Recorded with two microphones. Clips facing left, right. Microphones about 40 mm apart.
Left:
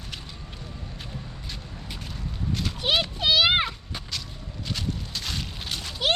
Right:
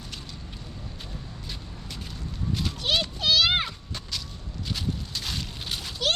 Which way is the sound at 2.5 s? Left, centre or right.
Centre.